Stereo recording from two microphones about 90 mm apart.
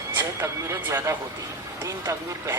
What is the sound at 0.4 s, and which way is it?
Speech, 30° right (ahead or behind).